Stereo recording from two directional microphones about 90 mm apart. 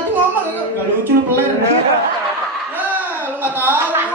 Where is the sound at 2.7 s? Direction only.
20° right (ahead or behind).